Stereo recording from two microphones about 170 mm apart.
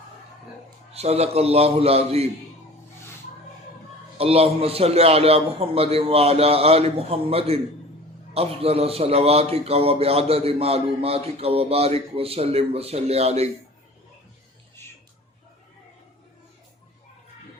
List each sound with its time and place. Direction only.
0.9 s a man's voice: 40° right (ahead or behind)
4.2 s a man's voice: 35° right (ahead or behind)